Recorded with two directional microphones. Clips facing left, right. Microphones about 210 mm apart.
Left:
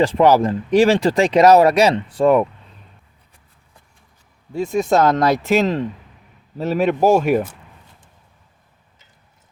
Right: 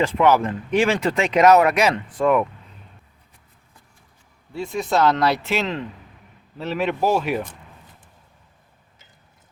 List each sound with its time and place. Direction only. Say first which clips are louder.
0.0 s speech: left 4 dB; 35° left (ahead or behind)
4.5 s speech: left 5 dB; 45° left (ahead or behind)